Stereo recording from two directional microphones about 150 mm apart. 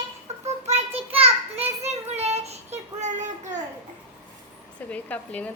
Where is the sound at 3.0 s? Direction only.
55° right (ahead or behind).